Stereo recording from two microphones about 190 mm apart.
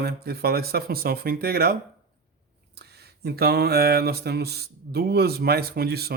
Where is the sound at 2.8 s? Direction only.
60° right (ahead or behind).